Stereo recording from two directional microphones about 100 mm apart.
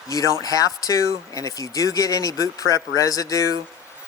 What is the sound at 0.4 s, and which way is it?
Speech, 35° left (ahead or behind).